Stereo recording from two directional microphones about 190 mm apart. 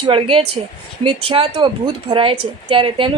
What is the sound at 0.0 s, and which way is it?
A woman's voice, 30° right (ahead or behind).